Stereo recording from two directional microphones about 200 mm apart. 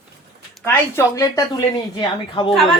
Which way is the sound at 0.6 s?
15° left (ahead or behind).